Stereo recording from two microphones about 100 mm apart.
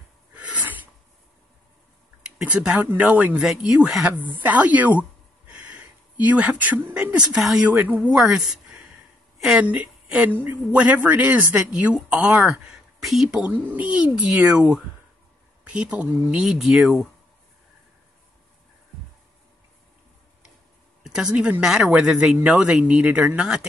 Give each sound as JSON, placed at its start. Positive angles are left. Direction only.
{"t": 0.4, "sound": "a sound", "side_deg": -15}
{"t": 2.3, "sound": "a woman's voice", "side_deg": -10}
{"t": 13.4, "sound": "a woman's voice", "side_deg": -15}
{"t": 21.0, "sound": "a woman's voice", "side_deg": -5}